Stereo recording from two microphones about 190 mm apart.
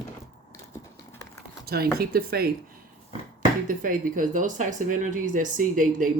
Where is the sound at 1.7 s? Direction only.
55° right (ahead or behind).